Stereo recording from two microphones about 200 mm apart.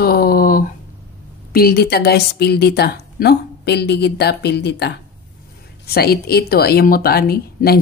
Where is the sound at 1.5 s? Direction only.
50° left (ahead or behind).